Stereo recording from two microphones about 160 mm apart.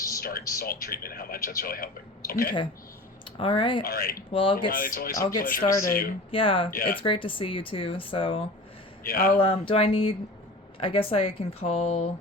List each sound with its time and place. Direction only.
0.2 s speech: 70° left (ahead or behind)
3.3 s speech: 35° left (ahead or behind)
3.8 s speech: 75° left (ahead or behind)
4.3 s speech: 35° left (ahead or behind)
4.5 s speech: 60° left (ahead or behind)
6.3 s speech: 35° left (ahead or behind)
6.7 s speech: 65° left (ahead or behind)
7.0 s speech: 30° left (ahead or behind)
9.0 s speech: 65° left (ahead or behind)
9.4 s speech: 35° left (ahead or behind)